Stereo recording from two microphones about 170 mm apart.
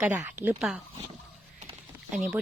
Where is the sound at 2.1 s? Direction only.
5° right (ahead or behind).